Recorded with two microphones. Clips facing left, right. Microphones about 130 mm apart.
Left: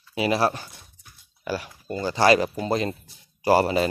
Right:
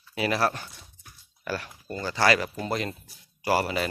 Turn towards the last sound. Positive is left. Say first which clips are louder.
# left 6 dB
turn(degrees=30)  # may be behind; listen again after turning